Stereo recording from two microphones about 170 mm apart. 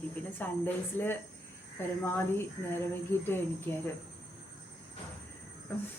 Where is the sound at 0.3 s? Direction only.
10° left (ahead or behind).